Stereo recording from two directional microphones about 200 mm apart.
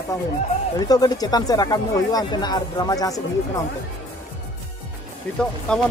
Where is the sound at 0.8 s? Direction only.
20° left (ahead or behind).